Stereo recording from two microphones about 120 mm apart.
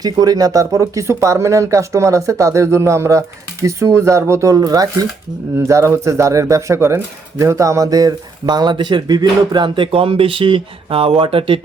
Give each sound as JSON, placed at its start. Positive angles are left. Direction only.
{"t": 0.0, "sound": "speech", "side_deg": -35}